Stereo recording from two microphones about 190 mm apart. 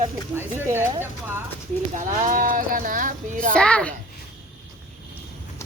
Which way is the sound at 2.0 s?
40° right (ahead or behind).